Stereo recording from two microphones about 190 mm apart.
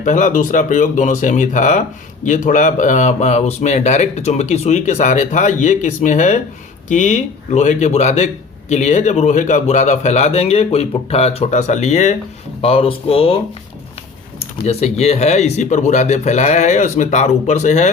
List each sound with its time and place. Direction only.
0.0 s a man's voice: 40° left (ahead or behind)
14.6 s a man's voice: 35° left (ahead or behind)